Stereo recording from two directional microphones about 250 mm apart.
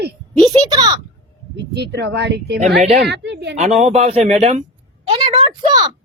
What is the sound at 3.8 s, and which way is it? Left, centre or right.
Speech, right.